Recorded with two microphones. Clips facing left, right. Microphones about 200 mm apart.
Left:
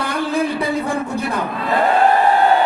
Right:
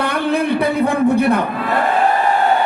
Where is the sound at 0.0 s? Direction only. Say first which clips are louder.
Right 2 dB; 60° right (ahead or behind).